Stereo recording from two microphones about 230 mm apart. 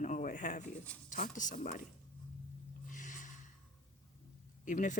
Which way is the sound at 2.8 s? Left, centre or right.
Left.